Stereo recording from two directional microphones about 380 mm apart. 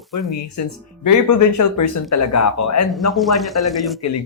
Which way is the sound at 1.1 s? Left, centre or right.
Left.